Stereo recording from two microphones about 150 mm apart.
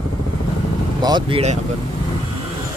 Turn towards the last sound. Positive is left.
turn(degrees=-30)  # may be behind; listen again after turning